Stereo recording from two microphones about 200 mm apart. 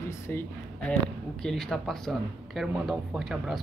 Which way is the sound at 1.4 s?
Centre (ahead or behind).